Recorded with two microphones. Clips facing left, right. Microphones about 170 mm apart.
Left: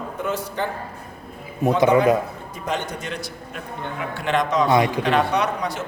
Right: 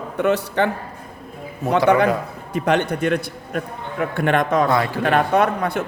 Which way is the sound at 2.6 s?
65° right (ahead or behind).